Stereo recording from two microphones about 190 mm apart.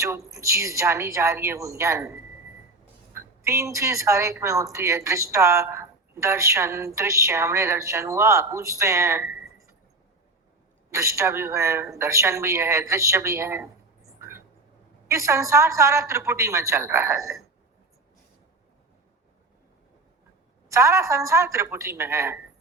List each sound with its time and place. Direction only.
0.3 s a woman's voice: 15° right (ahead or behind)
10.9 s a woman's voice: 15° right (ahead or behind)
14.2 s a sound: 15° right (ahead or behind)
15.0 s a woman's voice: 15° right (ahead or behind)
20.7 s a woman's voice: 15° right (ahead or behind)